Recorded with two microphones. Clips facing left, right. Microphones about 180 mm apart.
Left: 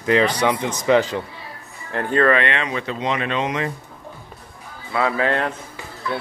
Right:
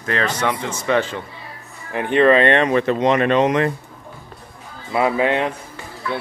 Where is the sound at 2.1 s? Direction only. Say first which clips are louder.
Right 4 dB; 20° right (ahead or behind).